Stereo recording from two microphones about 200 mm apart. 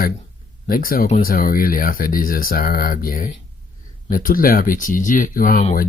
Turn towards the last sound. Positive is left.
turn(degrees=40)  # may be behind; listen again after turning